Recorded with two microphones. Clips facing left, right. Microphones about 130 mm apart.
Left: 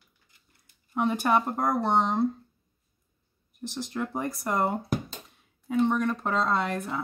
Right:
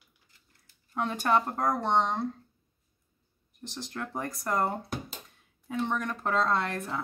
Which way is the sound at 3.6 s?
5° left (ahead or behind).